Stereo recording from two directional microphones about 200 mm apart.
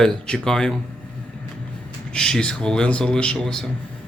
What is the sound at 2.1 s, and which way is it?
Speech, 5° left (ahead or behind).